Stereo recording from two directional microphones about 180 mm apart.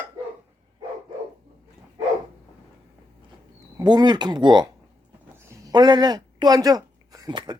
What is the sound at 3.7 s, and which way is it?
Speech, 25° right (ahead or behind).